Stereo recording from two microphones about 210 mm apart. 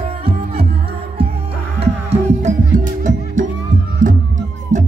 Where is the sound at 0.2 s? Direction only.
25° right (ahead or behind).